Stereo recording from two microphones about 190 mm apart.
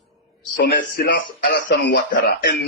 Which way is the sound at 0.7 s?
50° left (ahead or behind).